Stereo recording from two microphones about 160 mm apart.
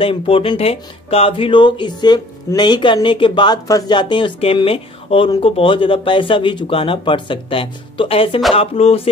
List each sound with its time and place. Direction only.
0.0 s speech: 35° left (ahead or behind)